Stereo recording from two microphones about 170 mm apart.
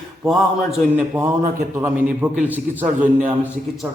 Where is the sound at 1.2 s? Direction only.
10° right (ahead or behind).